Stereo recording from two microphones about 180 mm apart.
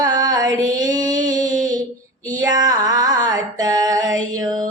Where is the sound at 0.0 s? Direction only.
20° right (ahead or behind).